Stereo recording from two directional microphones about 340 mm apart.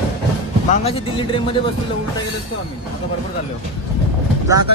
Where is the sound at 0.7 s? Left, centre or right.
Centre.